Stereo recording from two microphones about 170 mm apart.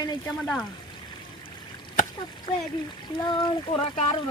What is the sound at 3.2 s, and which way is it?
Speech, 25° left (ahead or behind).